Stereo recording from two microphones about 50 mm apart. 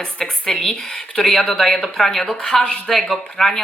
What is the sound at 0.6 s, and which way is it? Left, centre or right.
Speech, centre.